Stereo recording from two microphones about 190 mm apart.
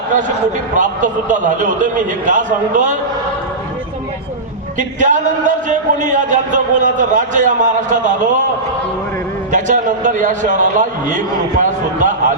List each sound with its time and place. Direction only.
0.8 s a man's voice: 40° right (ahead or behind)
4.8 s speech: 40° right (ahead or behind)
9.5 s a man's voice: 40° right (ahead or behind)